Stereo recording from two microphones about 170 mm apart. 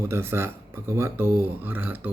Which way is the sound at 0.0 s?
15° right (ahead or behind).